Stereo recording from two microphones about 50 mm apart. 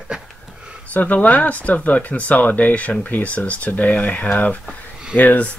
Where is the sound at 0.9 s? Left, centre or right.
Left.